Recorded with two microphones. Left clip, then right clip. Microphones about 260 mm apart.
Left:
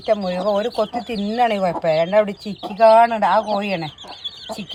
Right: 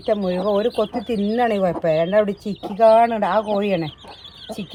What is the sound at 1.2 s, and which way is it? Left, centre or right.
Speech, centre.